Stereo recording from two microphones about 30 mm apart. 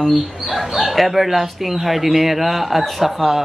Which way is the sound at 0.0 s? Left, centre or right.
Centre.